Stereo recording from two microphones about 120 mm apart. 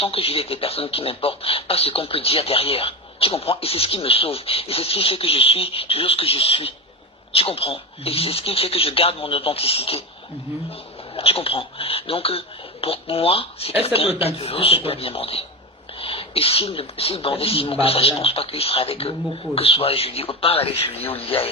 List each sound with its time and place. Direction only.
0.0 s speech: 55° left (ahead or behind)